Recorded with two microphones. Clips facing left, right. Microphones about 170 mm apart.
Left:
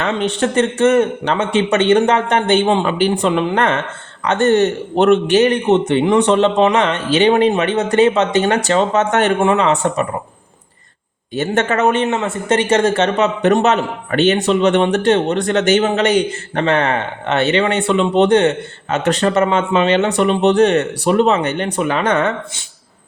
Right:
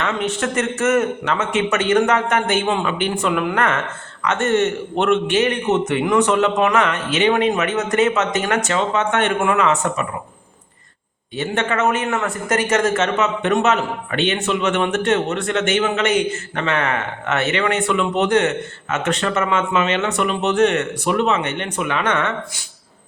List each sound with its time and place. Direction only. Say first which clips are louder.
0.0 s speech: left 4 dB; 30° left (ahead or behind)
9.4 s speech: left 4 dB; 30° left (ahead or behind)
11.3 s speech: left 4 dB; 45° left (ahead or behind)